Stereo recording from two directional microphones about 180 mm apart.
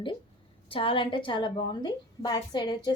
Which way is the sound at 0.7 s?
30° left (ahead or behind).